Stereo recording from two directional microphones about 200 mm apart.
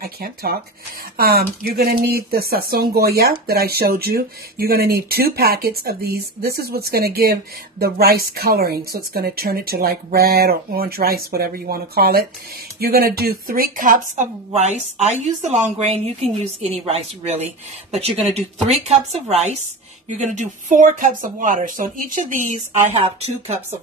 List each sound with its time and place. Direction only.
0.0 s speech: 50° right (ahead or behind)